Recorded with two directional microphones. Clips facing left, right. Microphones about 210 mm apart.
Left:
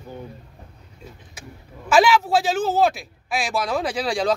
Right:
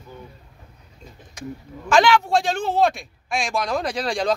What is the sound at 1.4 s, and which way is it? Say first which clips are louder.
A man's voice: right 10 dB; 5° left (ahead or behind).